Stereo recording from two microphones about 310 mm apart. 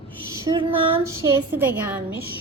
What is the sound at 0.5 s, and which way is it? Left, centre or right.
A woman's voice, centre.